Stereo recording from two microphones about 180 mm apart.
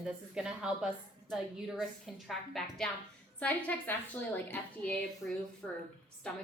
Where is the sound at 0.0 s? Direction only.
5° right (ahead or behind).